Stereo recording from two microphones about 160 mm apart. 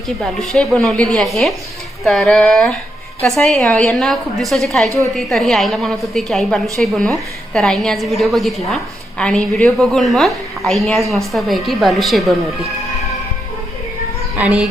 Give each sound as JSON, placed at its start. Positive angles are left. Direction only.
{"t": 0.2, "sound": "a woman's voice", "side_deg": 0}
{"t": 4.9, "sound": "a woman's voice", "side_deg": -20}
{"t": 5.1, "sound": "a woman's voice", "side_deg": 0}
{"t": 14.3, "sound": "a woman's voice", "side_deg": -5}